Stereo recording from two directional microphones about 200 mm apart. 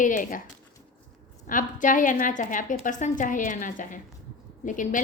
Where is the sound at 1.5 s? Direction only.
40° left (ahead or behind).